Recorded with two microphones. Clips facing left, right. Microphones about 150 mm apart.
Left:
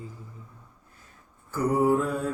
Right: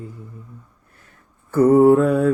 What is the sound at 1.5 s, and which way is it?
Mantra, 60° right (ahead or behind).